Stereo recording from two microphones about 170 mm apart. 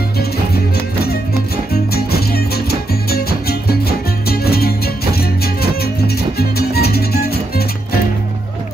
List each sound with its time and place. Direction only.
1.7 s music: 65° left (ahead or behind)